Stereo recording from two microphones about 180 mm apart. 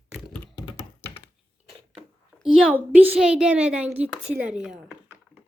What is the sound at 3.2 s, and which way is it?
Speech, 5° right (ahead or behind).